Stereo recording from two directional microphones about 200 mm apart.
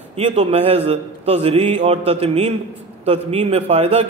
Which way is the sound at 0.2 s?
30° right (ahead or behind).